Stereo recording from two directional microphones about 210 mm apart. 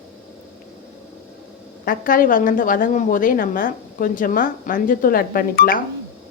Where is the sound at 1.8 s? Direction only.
40° left (ahead or behind).